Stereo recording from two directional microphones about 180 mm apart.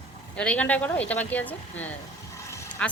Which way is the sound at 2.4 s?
15° left (ahead or behind).